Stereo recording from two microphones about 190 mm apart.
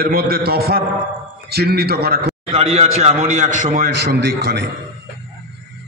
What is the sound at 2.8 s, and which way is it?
A man's voice, 35° right (ahead or behind).